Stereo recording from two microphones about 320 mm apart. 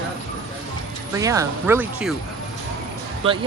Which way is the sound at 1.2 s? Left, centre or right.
Centre.